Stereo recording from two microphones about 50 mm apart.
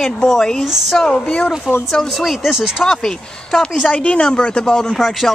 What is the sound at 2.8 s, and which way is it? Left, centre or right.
Speech, centre.